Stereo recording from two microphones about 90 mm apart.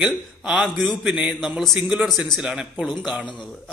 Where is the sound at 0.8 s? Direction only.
5° left (ahead or behind).